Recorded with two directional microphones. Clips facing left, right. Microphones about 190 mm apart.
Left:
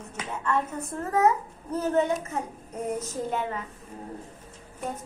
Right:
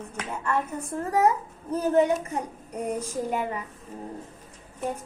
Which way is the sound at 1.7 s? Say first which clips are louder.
Right 3 dB; 10° right (ahead or behind).